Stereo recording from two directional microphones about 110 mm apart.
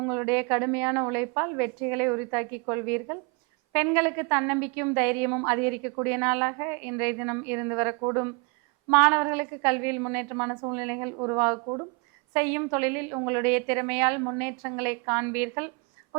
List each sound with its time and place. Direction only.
0.0 s a woman's voice: 20° right (ahead or behind)